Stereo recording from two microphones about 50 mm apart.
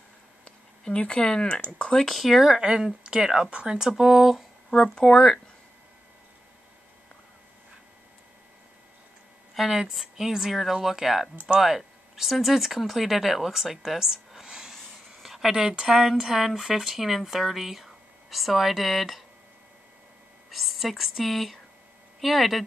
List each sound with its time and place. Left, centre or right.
0.5 s speech: left
2.0 s speech: centre
2.4 s speech: centre
3.9 s speech: centre
4.6 s speech: centre
9.6 s a woman's voice: centre
20.5 s speech: centre